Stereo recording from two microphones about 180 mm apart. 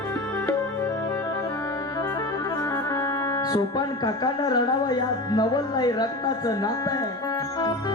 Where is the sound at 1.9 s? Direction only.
20° left (ahead or behind).